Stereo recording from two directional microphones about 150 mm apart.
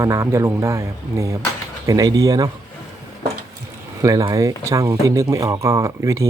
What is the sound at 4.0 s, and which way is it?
Speech, 20° right (ahead or behind).